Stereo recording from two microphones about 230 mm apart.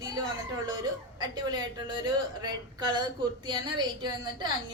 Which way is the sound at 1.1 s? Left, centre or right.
Centre.